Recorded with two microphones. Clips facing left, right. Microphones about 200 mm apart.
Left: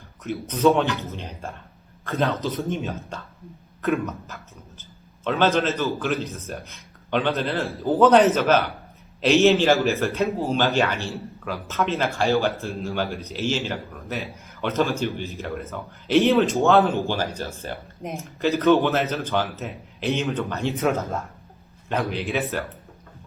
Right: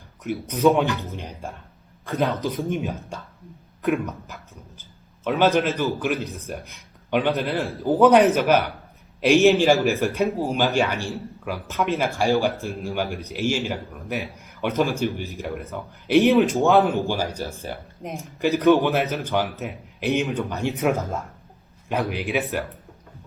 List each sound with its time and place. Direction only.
0.2 s speech: 10° right (ahead or behind)